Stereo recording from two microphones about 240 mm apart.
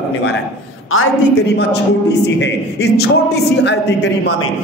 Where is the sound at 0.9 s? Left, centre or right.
Left.